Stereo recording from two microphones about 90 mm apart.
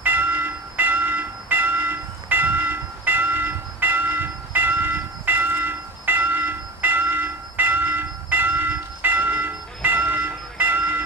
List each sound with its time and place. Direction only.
0.0 s train: 20° right (ahead or behind)